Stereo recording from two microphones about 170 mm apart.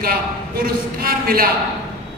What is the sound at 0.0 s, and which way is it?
A man's voice, 60° right (ahead or behind).